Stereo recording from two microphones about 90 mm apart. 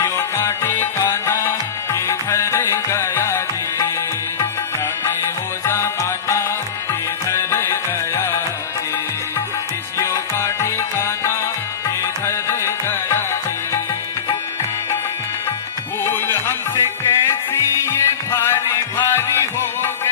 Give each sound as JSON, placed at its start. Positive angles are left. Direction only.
{"t": 0.0, "sound": "music", "side_deg": 25}
{"t": 5.6, "sound": "music", "side_deg": 30}
{"t": 10.0, "sound": "music", "side_deg": 30}
{"t": 16.0, "sound": "music", "side_deg": 25}